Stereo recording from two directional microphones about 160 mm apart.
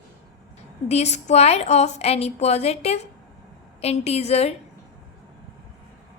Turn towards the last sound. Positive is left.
turn(degrees=40)  # may be behind; listen again after turning